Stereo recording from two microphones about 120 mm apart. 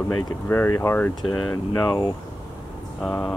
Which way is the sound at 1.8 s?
35° left (ahead or behind).